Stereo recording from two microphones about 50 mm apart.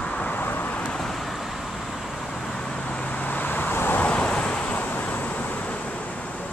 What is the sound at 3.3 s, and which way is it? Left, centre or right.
Vehicle, left.